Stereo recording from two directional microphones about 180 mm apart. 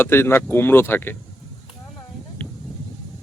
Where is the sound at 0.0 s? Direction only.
10° left (ahead or behind).